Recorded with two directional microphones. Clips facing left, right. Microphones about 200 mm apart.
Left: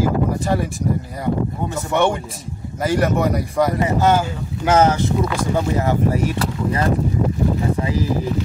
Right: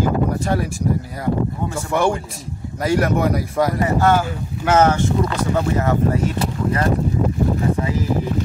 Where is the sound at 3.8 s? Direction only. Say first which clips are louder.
Right 1 dB; 20° left (ahead or behind).